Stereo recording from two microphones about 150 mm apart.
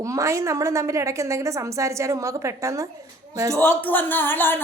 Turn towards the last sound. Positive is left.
turn(degrees=15)  # may be behind; listen again after turning